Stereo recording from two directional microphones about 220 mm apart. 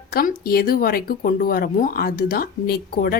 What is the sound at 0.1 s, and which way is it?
Speech, 40° left (ahead or behind).